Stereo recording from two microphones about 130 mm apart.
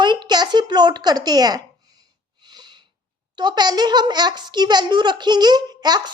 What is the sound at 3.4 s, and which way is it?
A woman's voice, 35° right (ahead or behind).